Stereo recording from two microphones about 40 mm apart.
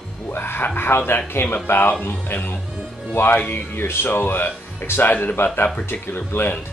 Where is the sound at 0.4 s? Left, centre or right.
Left.